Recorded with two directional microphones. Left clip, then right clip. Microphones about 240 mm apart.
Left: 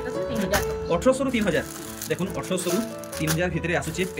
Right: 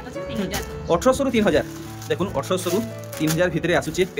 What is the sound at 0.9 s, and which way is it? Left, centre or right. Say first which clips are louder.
Speech: right 4 dB; centre.